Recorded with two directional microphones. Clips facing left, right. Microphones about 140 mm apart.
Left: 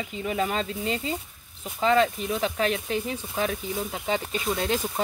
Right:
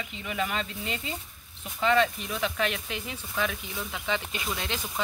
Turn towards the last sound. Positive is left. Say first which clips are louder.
# left 7 dB
turn(degrees=40)  # may be behind; listen again after turning